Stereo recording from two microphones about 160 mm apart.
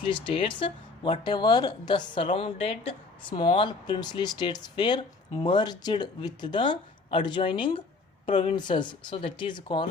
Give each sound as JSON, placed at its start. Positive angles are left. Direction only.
{"t": 0.0, "sound": "speech", "side_deg": 30}